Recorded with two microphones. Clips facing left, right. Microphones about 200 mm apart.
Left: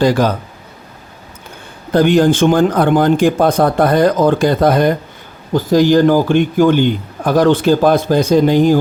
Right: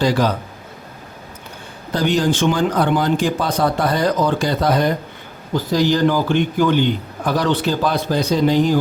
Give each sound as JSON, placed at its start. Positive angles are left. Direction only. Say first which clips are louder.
{"t": 0.0, "sound": "speech", "louder": "left 4 dB", "side_deg": 50}
{"t": 1.9, "sound": "speech", "louder": "left 7 dB", "side_deg": 55}